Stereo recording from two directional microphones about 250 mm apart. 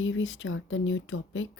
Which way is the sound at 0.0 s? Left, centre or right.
Left.